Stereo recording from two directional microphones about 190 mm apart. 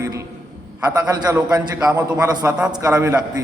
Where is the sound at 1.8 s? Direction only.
5° right (ahead or behind).